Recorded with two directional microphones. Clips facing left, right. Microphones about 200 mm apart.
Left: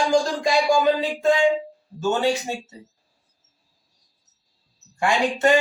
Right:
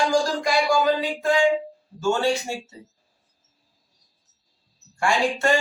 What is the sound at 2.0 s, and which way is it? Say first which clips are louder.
Speech: left 1 dB; 20° left (ahead or behind).